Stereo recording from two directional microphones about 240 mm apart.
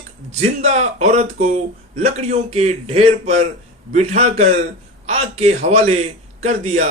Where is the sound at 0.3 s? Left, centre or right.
Right.